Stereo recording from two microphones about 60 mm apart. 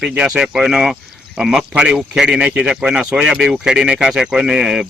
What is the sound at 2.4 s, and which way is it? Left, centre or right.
Speech, right.